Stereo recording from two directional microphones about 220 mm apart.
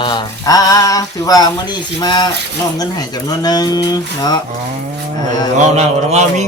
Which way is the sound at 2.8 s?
15° left (ahead or behind).